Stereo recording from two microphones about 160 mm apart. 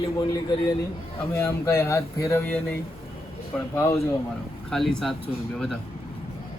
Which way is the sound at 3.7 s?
15° left (ahead or behind).